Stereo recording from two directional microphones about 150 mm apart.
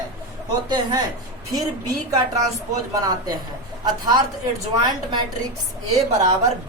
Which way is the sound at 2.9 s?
25° right (ahead or behind).